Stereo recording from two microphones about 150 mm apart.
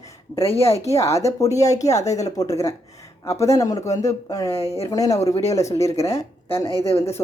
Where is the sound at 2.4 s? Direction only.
20° left (ahead or behind).